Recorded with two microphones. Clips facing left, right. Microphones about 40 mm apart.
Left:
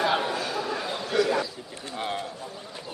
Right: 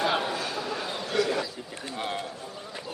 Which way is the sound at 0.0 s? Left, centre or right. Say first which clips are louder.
Left 2 dB; centre.